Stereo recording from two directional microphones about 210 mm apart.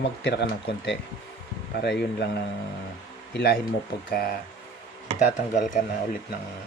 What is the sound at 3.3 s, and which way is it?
Speech, 50° left (ahead or behind).